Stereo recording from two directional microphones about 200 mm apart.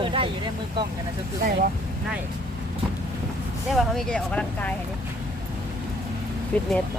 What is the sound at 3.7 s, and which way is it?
Speech, centre (ahead or behind).